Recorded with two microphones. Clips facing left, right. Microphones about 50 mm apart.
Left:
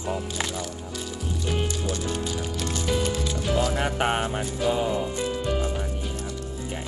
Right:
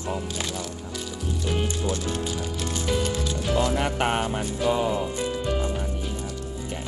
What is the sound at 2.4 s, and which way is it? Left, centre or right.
Music, centre.